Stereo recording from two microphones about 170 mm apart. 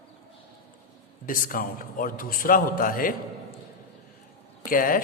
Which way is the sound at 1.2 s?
50° left (ahead or behind).